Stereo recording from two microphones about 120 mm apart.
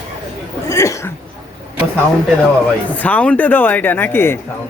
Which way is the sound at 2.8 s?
15° left (ahead or behind).